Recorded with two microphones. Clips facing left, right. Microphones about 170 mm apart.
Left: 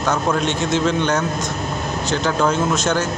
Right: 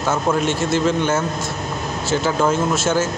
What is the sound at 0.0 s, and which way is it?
A man's voice, 5° right (ahead or behind).